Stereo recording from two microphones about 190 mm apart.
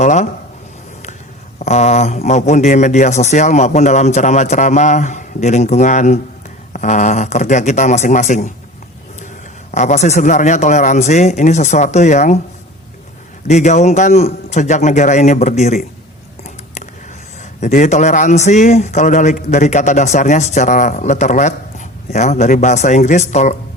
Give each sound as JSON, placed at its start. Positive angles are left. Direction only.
{"t": 0.0, "sound": "a man's voice", "side_deg": 40}
{"t": 1.5, "sound": "a man's voice", "side_deg": 35}
{"t": 9.7, "sound": "a man's voice", "side_deg": 35}
{"t": 13.5, "sound": "a man's voice", "side_deg": 40}
{"t": 17.6, "sound": "a man's voice", "side_deg": 40}